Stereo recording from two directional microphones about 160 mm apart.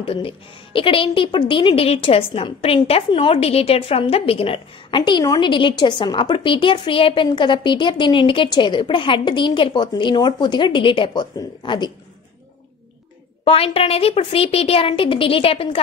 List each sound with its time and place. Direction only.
0.0 s a woman's voice: 35° left (ahead or behind)
13.4 s a woman's voice: 35° left (ahead or behind)